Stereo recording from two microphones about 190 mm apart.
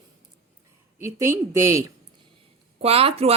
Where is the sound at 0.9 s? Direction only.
15° right (ahead or behind).